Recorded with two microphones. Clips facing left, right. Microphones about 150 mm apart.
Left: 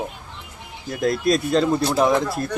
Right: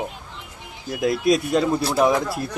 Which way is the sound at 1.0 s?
10° right (ahead or behind).